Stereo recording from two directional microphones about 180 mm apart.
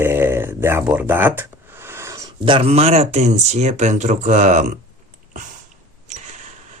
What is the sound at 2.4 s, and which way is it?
Speech, 30° right (ahead or behind).